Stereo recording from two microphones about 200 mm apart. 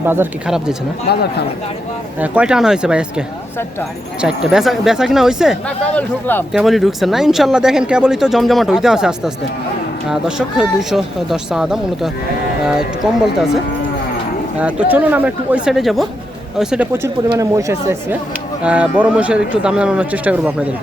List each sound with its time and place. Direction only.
0.0 s speech: 10° right (ahead or behind)
1.0 s speech: 55° left (ahead or behind)
2.2 s speech: 5° right (ahead or behind)
14.6 s speech: 5° right (ahead or behind)